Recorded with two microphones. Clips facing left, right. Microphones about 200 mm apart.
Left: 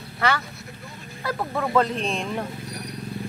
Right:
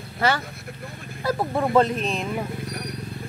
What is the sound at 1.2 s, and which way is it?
Speech, 25° right (ahead or behind).